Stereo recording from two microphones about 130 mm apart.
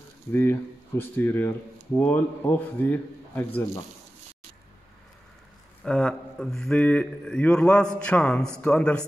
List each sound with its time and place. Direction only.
0.3 s speech: 15° left (ahead or behind)
5.9 s speech: 5° left (ahead or behind)